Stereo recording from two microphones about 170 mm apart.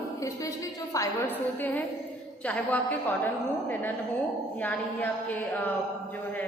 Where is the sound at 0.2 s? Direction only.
20° left (ahead or behind).